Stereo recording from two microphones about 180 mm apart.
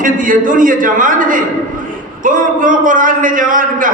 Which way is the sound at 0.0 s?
50° right (ahead or behind).